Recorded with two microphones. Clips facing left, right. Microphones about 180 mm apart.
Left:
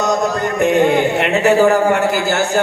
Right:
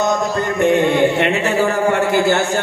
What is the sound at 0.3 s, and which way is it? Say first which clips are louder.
Chant: left 1 dB; 65° left (ahead or behind).